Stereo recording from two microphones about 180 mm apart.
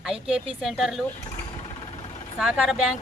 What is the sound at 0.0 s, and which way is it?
A woman's voice, 5° right (ahead or behind).